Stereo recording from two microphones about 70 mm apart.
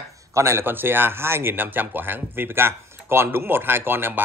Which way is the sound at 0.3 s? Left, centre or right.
Right.